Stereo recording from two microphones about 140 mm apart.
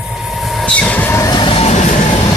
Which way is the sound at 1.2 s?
30° left (ahead or behind).